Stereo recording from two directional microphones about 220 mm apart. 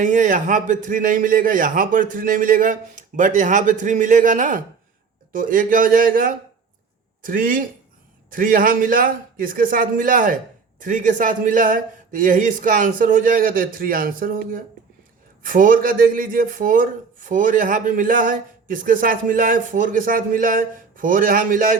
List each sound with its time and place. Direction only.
0.0 s a man's voice: 35° right (ahead or behind)